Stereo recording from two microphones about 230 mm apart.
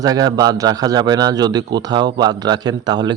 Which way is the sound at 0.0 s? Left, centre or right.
Centre.